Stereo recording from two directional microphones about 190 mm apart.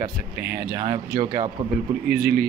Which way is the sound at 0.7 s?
20° right (ahead or behind).